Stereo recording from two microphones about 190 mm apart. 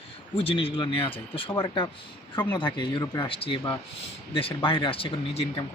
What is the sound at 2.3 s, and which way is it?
Speech, 25° left (ahead or behind).